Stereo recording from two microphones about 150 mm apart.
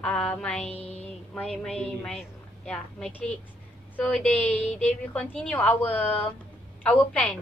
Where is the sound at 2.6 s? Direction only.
5° left (ahead or behind).